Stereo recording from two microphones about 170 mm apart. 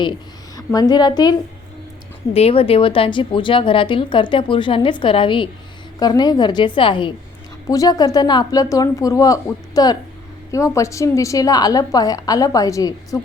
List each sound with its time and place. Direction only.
0.0 s a woman's voice: 25° left (ahead or behind)
2.3 s a woman's voice: 35° left (ahead or behind); by 13.1 s 20° left (ahead or behind)